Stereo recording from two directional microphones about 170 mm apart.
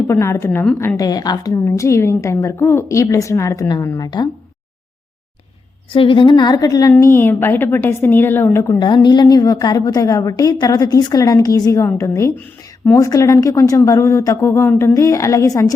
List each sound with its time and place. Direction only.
0.1 s a woman's voice: 15° left (ahead or behind)
5.9 s a woman's voice: 30° left (ahead or behind)